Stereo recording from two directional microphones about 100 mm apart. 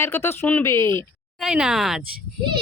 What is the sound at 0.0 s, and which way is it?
Speech, 25° left (ahead or behind).